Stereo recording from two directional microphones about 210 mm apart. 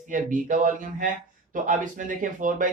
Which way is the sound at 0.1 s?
40° right (ahead or behind).